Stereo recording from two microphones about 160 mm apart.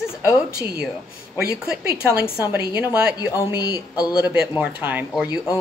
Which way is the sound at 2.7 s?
25° left (ahead or behind).